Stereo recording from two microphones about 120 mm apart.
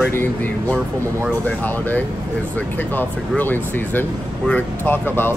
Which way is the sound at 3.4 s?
15° left (ahead or behind).